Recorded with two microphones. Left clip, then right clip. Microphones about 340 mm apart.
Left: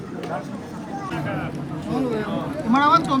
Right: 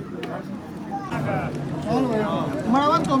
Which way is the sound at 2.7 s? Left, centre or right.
Centre.